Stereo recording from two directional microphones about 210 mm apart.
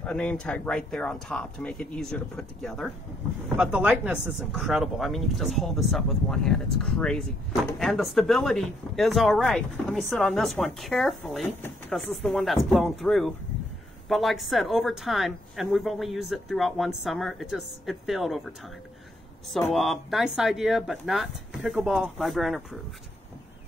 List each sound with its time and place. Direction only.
0.0 s speech: 5° left (ahead or behind)
19.7 s speech: centre (ahead or behind)